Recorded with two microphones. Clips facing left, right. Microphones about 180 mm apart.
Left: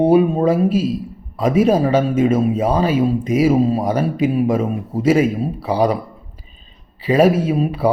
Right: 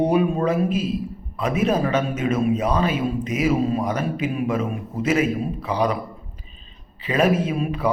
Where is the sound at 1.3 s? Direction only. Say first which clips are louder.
Left 7 dB; 30° left (ahead or behind).